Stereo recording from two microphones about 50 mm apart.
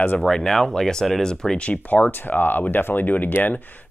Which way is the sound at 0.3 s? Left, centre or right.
Centre.